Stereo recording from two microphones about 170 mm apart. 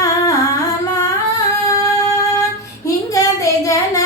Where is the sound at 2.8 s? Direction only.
20° left (ahead or behind).